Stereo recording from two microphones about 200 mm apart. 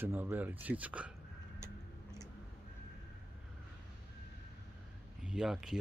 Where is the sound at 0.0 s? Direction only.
10° right (ahead or behind).